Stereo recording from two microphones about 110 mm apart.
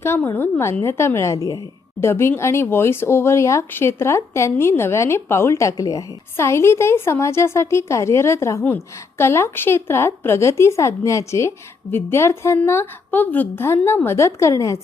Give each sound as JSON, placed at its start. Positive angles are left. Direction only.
{"t": 0.0, "sound": "speech", "side_deg": 20}